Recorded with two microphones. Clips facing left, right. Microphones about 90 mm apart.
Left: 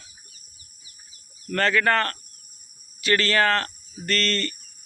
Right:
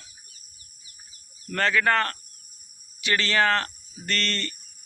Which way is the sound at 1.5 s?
15° right (ahead or behind).